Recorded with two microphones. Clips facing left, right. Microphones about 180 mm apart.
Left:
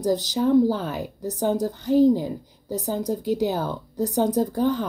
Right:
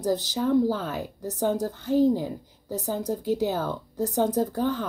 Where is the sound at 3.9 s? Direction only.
35° left (ahead or behind).